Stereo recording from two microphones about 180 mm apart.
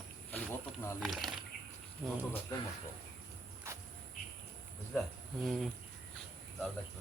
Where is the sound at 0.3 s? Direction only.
10° left (ahead or behind).